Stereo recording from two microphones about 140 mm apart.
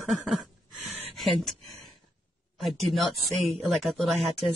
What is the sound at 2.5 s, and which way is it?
Speech, centre (ahead or behind).